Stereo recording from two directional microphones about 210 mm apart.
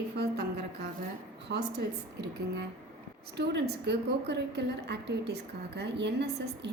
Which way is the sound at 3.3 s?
55° right (ahead or behind).